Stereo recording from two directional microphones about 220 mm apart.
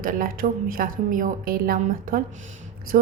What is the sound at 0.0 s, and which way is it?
A woman's voice, 40° right (ahead or behind).